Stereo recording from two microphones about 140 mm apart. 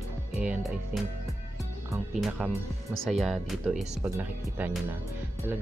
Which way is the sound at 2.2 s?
5° right (ahead or behind).